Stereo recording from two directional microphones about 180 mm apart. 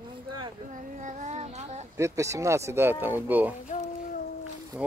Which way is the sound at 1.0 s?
40° right (ahead or behind).